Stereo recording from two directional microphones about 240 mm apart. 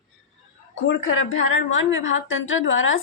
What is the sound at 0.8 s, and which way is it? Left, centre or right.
A woman's voice, left.